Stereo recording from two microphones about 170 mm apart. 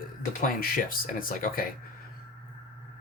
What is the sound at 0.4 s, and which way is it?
Speech, 55° left (ahead or behind).